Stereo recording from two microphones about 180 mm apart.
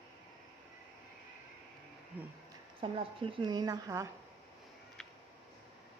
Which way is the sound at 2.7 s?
30° right (ahead or behind).